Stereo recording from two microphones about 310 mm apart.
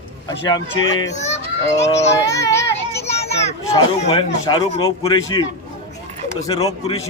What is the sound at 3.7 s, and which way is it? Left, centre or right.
A man's voice, centre.